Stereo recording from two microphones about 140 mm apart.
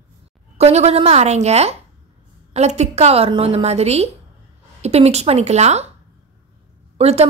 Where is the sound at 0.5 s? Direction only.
50° right (ahead or behind).